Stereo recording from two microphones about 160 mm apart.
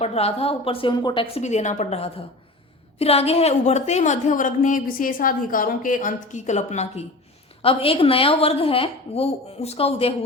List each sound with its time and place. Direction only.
0.0 s a woman's voice: 40° left (ahead or behind)